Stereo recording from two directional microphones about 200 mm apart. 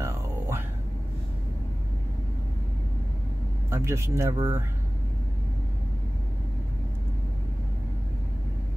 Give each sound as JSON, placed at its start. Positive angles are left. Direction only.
{"t": 0.0, "sound": "music", "side_deg": -15}
{"t": 3.7, "sound": "speech", "side_deg": -15}